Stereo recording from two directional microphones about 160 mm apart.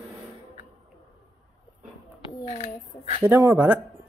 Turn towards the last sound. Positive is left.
turn(degrees=-10)  # may be behind; listen again after turning